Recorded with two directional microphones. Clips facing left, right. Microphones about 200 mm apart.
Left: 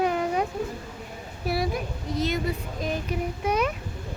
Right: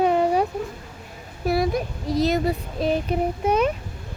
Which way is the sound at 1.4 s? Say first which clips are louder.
Right 5 dB; 45° right (ahead or behind).